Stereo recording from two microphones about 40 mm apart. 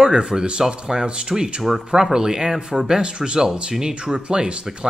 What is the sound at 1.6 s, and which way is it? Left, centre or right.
Speech, centre.